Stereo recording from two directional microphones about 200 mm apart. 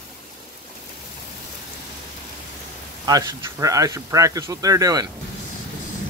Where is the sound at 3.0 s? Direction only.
20° right (ahead or behind).